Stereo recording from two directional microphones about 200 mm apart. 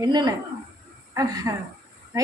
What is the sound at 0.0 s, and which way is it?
A child's voice, 20° right (ahead or behind).